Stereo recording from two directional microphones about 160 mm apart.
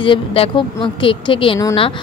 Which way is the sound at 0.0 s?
35° left (ahead or behind).